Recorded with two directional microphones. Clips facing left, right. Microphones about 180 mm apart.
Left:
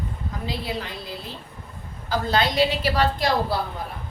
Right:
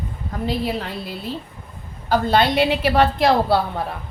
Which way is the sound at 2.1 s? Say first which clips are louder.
Right 5 dB; 60° right (ahead or behind).